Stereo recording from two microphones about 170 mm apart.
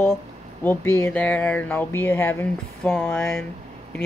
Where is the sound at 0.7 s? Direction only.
15° left (ahead or behind).